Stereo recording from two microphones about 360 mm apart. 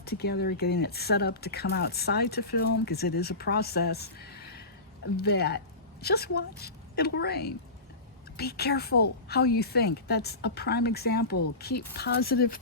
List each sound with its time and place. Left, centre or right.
0.0 s a woman's voice: left